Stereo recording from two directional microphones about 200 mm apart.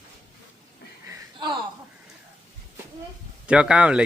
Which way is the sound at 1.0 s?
25° right (ahead or behind).